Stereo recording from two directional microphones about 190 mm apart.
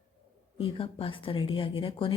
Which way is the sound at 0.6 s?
30° left (ahead or behind).